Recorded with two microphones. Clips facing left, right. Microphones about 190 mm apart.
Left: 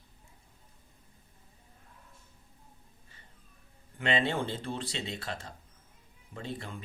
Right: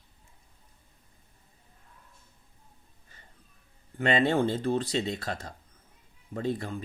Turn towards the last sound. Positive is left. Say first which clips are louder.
# right 9 dB
turn(degrees=-45)  # may be behind; listen again after turning